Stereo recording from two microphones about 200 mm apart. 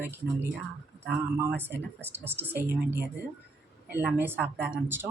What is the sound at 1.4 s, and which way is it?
Speech, 10° right (ahead or behind).